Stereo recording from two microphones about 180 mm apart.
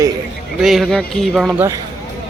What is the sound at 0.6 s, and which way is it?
Speech, centre (ahead or behind).